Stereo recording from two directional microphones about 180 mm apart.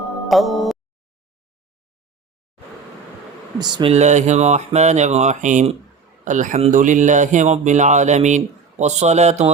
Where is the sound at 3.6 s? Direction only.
25° right (ahead or behind).